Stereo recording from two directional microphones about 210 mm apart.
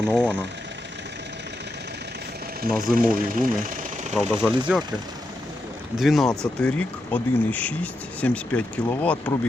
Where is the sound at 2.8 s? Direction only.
40° right (ahead or behind).